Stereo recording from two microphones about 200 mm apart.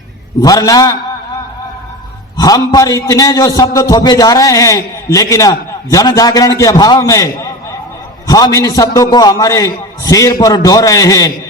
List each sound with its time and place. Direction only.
0.4 s a man's voice: 20° left (ahead or behind)
2.4 s a man's voice: 20° left (ahead or behind)